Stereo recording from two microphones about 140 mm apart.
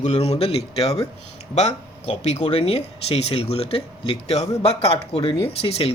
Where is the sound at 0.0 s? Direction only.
50° left (ahead or behind).